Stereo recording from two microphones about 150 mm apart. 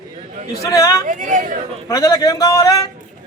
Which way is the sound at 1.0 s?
55° right (ahead or behind).